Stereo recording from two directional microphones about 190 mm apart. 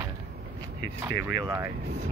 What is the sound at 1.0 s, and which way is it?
Speech, 15° right (ahead or behind).